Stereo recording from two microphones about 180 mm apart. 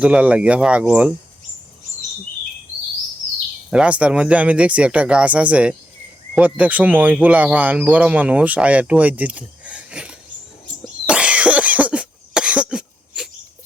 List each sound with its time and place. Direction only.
0.0 s speech: 5° right (ahead or behind)
3.7 s speech: 5° right (ahead or behind)
11.0 s cough: 5° right (ahead or behind)